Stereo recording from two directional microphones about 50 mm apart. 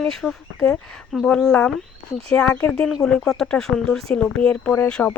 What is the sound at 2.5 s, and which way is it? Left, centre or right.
Speech, left.